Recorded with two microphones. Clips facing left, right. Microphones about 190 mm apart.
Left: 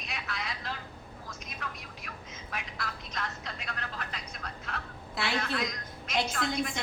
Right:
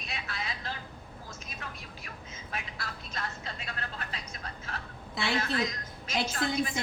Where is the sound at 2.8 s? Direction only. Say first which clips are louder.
Left 1 dB; 30° right (ahead or behind).